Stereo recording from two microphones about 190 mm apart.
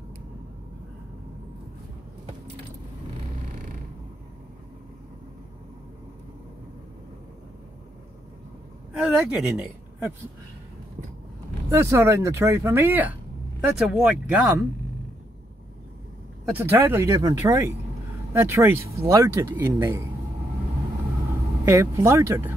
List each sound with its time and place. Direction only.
8.9 s speech: 5° right (ahead or behind)
11.7 s speech: 15° right (ahead or behind)
16.5 s speech: 10° right (ahead or behind)
21.6 s speech: 15° right (ahead or behind)